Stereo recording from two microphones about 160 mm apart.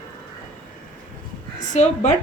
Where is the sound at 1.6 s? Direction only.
50° left (ahead or behind).